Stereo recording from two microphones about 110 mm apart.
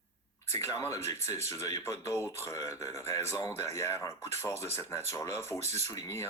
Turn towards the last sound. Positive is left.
turn(degrees=25)  # may be behind; listen again after turning